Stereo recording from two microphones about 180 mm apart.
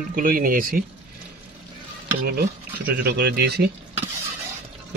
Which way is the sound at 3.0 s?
60° right (ahead or behind).